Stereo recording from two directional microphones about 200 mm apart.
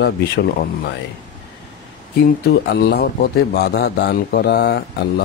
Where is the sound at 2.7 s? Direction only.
55° left (ahead or behind).